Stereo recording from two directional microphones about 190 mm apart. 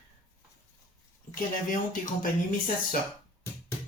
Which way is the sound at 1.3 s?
45° left (ahead or behind).